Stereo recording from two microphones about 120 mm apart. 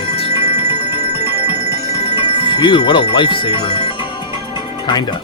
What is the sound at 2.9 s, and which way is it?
Speech, 45° left (ahead or behind).